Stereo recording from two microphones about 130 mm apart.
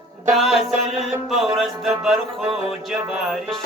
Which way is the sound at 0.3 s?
Centre (ahead or behind).